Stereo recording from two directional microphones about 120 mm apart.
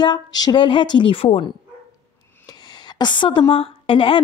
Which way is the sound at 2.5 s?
35° left (ahead or behind).